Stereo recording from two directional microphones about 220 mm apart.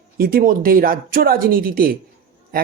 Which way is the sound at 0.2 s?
40° right (ahead or behind).